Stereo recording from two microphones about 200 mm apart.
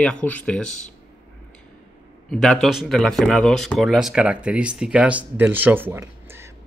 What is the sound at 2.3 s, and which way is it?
Speech, centre (ahead or behind).